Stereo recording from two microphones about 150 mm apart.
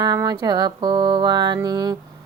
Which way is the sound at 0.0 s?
25° right (ahead or behind).